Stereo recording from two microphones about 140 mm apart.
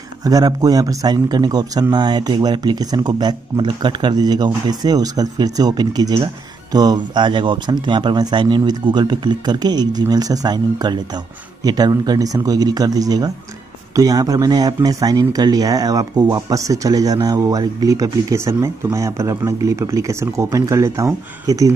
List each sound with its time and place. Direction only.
0.2 s speech: 25° right (ahead or behind)